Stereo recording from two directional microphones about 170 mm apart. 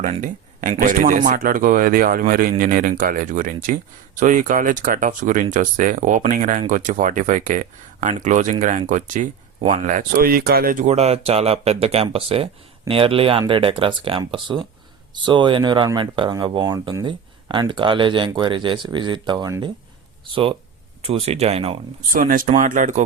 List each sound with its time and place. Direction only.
0.0 s speech: 50° right (ahead or behind)
9.6 s speech: 35° right (ahead or behind)
9.8 s speech: 50° right (ahead or behind)
22.1 s speech: 55° right (ahead or behind)